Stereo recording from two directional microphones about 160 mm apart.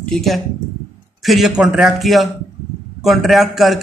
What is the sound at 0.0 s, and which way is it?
A man's voice, centre (ahead or behind).